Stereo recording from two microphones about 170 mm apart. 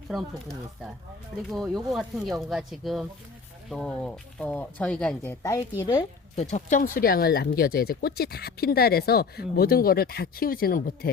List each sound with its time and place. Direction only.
0.1 s speech: centre (ahead or behind); by 5.6 s 15° left (ahead or behind)
5.8 s speech: 25° left (ahead or behind)
6.3 s speech: 40° left (ahead or behind); by 11.1 s 55° left (ahead or behind)